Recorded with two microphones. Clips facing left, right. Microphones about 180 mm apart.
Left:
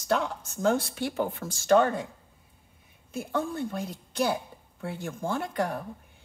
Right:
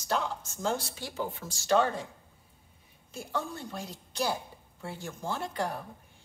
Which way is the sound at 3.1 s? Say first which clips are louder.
Left 6 dB; 55° left (ahead or behind).